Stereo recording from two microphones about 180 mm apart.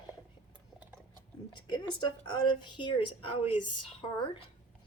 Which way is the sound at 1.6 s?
25° left (ahead or behind).